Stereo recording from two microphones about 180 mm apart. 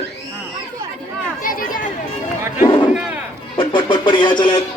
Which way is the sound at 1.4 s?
50° left (ahead or behind).